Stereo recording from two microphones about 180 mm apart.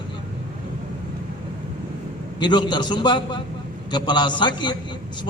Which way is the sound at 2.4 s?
25° left (ahead or behind).